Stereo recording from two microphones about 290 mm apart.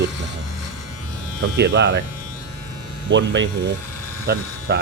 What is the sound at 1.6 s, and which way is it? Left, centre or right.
Speech, right.